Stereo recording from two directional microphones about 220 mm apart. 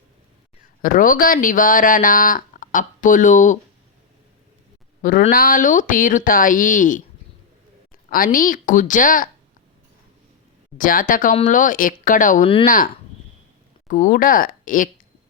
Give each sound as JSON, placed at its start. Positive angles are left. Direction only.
{"t": 0.8, "sound": "speech", "side_deg": 40}
{"t": 5.0, "sound": "speech", "side_deg": 40}
{"t": 8.1, "sound": "speech", "side_deg": 40}
{"t": 10.8, "sound": "speech", "side_deg": 40}